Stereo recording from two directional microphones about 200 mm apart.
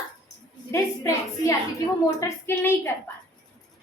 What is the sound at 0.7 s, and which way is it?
A woman's voice, 15° left (ahead or behind).